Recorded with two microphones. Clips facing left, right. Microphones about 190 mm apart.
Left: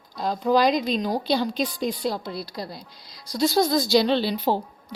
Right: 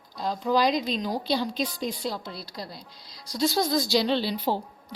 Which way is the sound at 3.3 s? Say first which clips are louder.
Left 4 dB; 60° left (ahead or behind).